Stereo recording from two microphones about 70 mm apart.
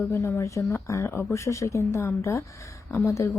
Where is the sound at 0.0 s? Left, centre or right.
Left.